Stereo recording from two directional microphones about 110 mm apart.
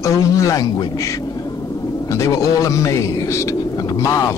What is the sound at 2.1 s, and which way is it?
Speech, 30° left (ahead or behind).